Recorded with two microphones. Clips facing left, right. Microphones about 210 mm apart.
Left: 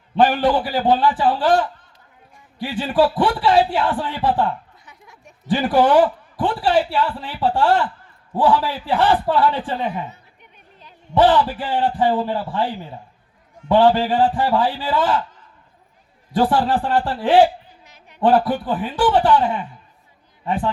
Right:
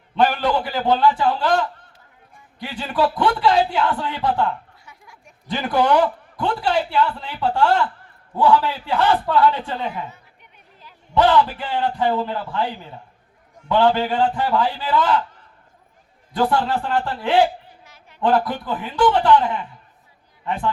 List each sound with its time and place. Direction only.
0.2 s a man's voice: 30° left (ahead or behind)
9.9 s speech: 20° left (ahead or behind)
11.1 s speech: 30° left (ahead or behind)
16.4 s speech: 35° left (ahead or behind)
17.8 s a sound: 20° left (ahead or behind)
18.2 s a man's voice: 35° left (ahead or behind)